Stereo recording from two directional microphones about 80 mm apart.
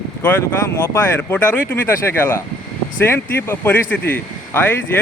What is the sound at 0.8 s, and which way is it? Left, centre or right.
Speech, left.